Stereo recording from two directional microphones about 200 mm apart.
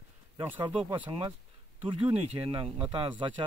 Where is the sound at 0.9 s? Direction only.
20° right (ahead or behind).